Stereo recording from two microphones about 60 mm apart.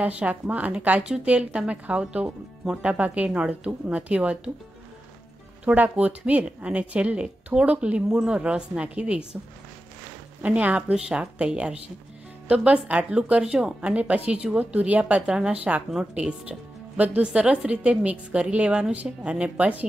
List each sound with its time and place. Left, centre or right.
0.0 s speech: right
5.7 s speech: right
10.4 s speech: right
13.4 s speech: centre